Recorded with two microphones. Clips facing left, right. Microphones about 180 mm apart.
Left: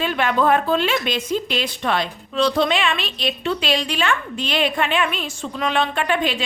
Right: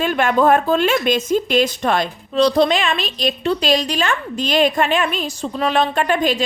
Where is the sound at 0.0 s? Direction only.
45° right (ahead or behind).